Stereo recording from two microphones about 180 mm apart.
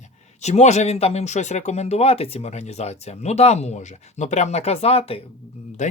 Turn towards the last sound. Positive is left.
turn(degrees=40)  # may be behind; listen again after turning